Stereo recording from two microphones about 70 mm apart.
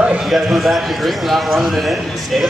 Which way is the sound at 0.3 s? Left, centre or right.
Centre.